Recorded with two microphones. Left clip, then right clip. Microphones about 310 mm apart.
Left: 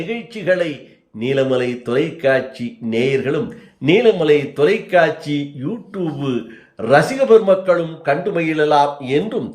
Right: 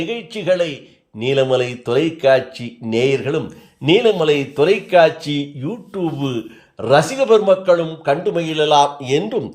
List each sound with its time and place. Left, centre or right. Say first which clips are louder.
0.1 s a man's voice: left 2 dB; centre